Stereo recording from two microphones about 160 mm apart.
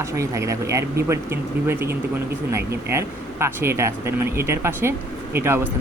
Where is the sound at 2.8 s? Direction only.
15° right (ahead or behind).